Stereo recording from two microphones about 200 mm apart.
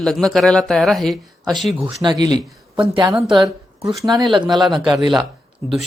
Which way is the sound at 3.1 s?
Centre (ahead or behind).